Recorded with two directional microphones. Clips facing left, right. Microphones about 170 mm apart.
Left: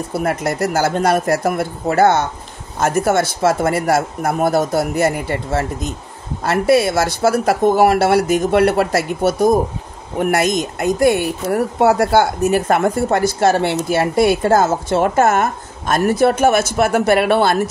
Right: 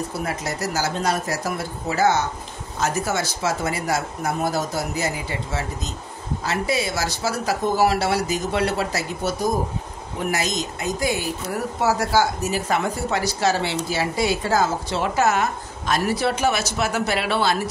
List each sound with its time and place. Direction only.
0.1 s speech: 60° left (ahead or behind)